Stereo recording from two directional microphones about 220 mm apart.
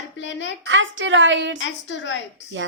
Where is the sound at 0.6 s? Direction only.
60° right (ahead or behind).